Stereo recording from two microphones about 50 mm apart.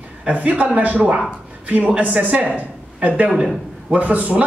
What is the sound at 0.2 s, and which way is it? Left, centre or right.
A man's voice, right.